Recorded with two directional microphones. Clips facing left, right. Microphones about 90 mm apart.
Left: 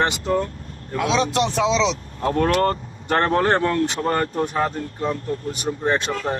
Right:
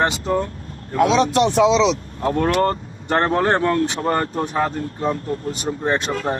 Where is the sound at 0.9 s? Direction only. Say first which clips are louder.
Right 4 dB; 45° right (ahead or behind).